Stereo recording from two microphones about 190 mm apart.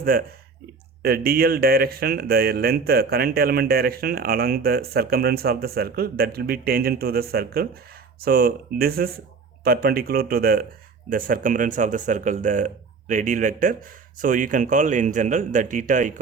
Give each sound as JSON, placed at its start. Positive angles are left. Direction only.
{"t": 0.0, "sound": "speech", "side_deg": -50}